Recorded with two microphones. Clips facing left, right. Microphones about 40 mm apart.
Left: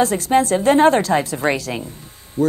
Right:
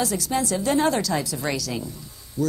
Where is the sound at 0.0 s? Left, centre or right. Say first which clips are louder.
Left 8 dB; left.